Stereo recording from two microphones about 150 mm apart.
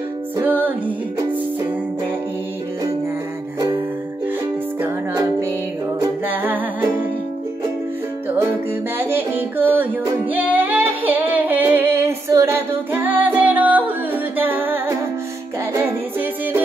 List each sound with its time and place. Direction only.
0.4 s music: 10° right (ahead or behind)
4.8 s music: 15° right (ahead or behind)
8.4 s music: 15° right (ahead or behind)
10.3 s female singing: 10° right (ahead or behind)
15.7 s music: 15° right (ahead or behind)